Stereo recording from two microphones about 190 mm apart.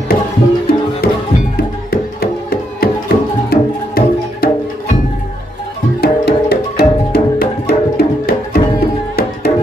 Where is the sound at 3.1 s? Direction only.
35° left (ahead or behind).